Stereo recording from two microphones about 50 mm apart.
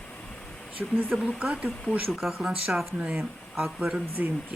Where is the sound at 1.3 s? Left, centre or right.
Right; by 3.0 s centre.